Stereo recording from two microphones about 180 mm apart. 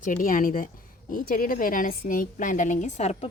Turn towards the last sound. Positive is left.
turn(degrees=40)  # may be behind; listen again after turning